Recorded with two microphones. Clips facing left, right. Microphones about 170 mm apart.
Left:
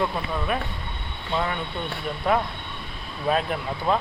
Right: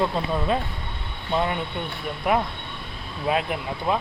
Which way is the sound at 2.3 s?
15° right (ahead or behind).